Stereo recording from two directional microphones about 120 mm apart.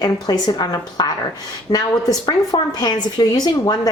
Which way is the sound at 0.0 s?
35° left (ahead or behind).